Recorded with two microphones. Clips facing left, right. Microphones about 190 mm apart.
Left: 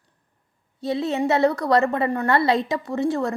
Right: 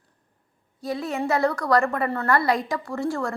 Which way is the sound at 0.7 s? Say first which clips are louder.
Left 4 dB; 25° left (ahead or behind).